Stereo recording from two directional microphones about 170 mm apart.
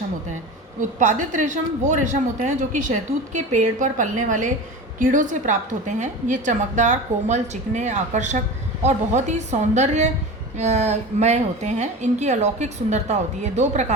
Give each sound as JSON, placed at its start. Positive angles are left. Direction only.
{"t": 0.8, "sound": "speech", "side_deg": -45}